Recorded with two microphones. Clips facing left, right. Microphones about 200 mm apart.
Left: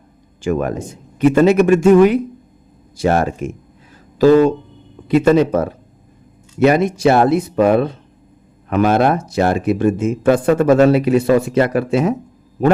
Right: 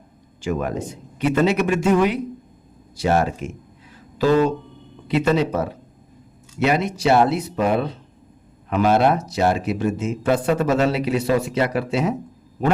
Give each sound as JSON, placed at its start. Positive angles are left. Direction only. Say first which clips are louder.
{"t": 0.4, "sound": "speech", "louder": "left 5 dB", "side_deg": 50}